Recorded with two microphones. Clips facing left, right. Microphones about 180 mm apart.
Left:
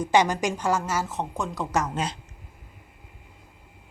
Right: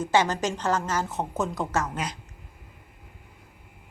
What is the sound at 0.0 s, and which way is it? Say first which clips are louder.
A woman's voice: left 2 dB; 15° left (ahead or behind).